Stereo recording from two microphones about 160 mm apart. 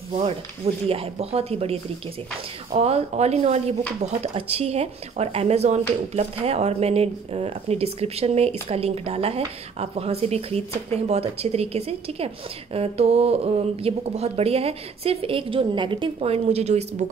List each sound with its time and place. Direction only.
0.8 s speech: 35° right (ahead or behind)